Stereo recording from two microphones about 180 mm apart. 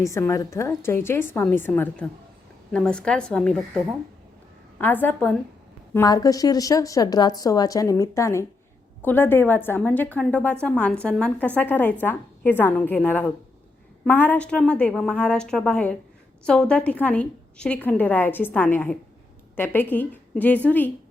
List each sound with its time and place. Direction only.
0.0 s a woman's voice: 15° left (ahead or behind)
4.8 s a woman's voice: 10° left (ahead or behind)